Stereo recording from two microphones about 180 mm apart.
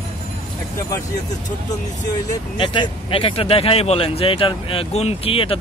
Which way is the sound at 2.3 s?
25° left (ahead or behind).